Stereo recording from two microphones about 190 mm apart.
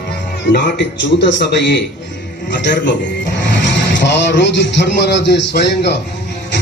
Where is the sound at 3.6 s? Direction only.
65° left (ahead or behind).